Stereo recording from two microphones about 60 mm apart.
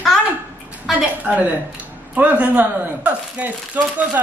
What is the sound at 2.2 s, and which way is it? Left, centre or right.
Speech, right.